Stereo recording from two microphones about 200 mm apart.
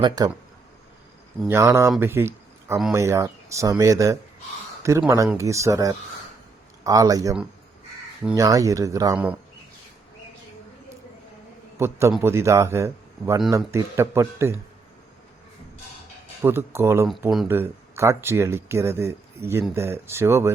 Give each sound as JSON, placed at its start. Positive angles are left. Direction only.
{"t": 0.2, "sound": "speech", "side_deg": -20}
{"t": 1.4, "sound": "speech", "side_deg": -10}
{"t": 8.4, "sound": "speech", "side_deg": -15}
{"t": 11.8, "sound": "speech", "side_deg": -15}
{"t": 16.4, "sound": "speech", "side_deg": -10}